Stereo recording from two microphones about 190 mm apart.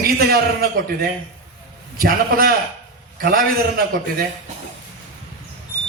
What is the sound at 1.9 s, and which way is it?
A man's voice, 50° right (ahead or behind).